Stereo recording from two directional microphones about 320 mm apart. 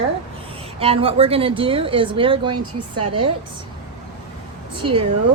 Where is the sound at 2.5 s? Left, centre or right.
Right.